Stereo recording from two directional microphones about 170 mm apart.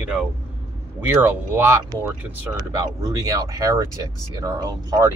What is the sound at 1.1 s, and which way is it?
Speech, 10° right (ahead or behind).